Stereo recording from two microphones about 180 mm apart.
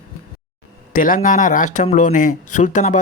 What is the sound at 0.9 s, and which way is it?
Speech, 50° left (ahead or behind).